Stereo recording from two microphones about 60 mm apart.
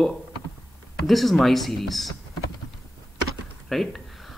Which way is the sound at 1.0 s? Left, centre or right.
Centre.